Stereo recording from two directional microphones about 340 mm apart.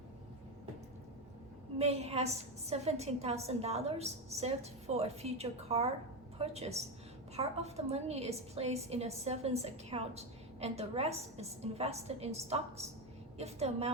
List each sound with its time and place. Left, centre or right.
1.8 s a woman's voice: centre